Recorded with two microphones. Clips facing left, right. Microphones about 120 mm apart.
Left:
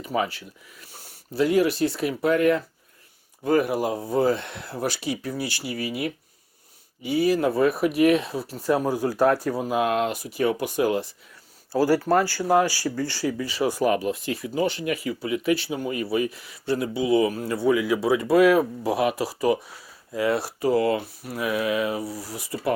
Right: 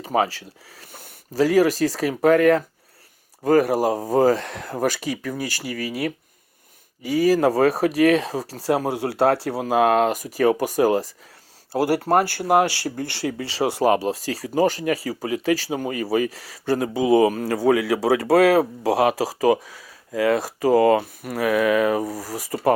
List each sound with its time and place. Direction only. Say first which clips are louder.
0.1 s speech: right 4 dB; 75° right (ahead or behind)
0.9 s a sound: right 5 dB; 55° right (ahead or behind)
1.5 s speech: right 4 dB; 40° right (ahead or behind)
3.4 s speech: right 4 dB; 40° right (ahead or behind)
7.4 s speech: right 3 dB; 90° right
8.5 s speech: even; 80° right
9.9 s speech: right 5 dB; 45° right (ahead or behind)
11.7 s speech: right 1 dB; 60° right (ahead or behind)
13.4 s speech: right 3 dB; 85° right
13.9 s speech: right 3 dB; 30° right (ahead or behind)
15.7 s speech: right 3 dB; 90° right
16.6 s speech: right 4 dB; 45° right (ahead or behind)
17.4 s speech: right 3 dB; 90° right
21.2 s speech: right 6 dB; 65° right (ahead or behind); by 22.7 s 45° right (ahead or behind)